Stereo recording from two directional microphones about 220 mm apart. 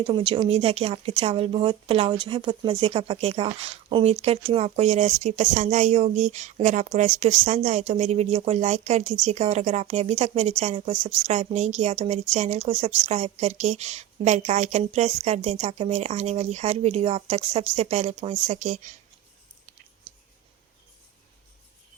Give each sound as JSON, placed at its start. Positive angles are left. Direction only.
{"t": 0.0, "sound": "a woman's voice", "side_deg": -25}